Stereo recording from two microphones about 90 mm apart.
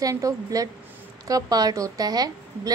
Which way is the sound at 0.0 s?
40° right (ahead or behind).